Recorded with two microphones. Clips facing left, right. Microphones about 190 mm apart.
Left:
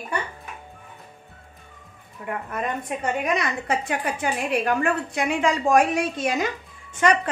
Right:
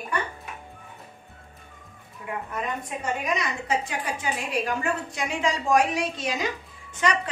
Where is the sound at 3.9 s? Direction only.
60° left (ahead or behind).